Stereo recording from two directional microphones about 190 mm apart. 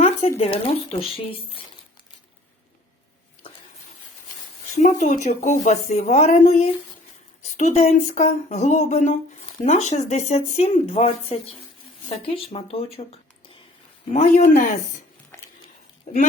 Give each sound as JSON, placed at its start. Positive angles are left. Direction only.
{"t": 0.0, "sound": "a woman's voice", "side_deg": 35}
{"t": 4.8, "sound": "a woman's voice", "side_deg": 40}
{"t": 16.1, "sound": "speech", "side_deg": 35}